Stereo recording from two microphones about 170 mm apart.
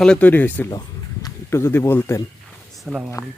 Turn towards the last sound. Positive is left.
turn(degrees=-5)  # may be behind; listen again after turning